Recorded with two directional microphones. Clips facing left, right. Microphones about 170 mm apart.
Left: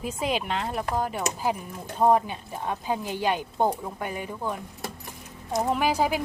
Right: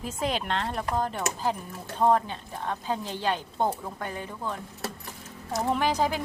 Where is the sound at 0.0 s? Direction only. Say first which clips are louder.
Left 2 dB; 10° left (ahead or behind).